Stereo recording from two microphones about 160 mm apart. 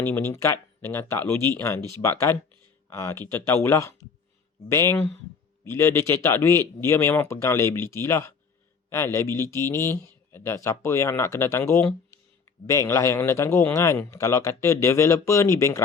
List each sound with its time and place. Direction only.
0.0 s speech: 15° left (ahead or behind)